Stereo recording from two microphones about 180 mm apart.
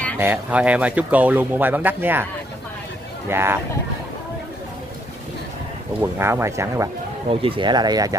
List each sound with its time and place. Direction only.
0.2 s speech: 10° right (ahead or behind)
3.3 s speech: 15° right (ahead or behind)
5.9 s speech: 15° right (ahead or behind)
7.2 s speech: 30° right (ahead or behind)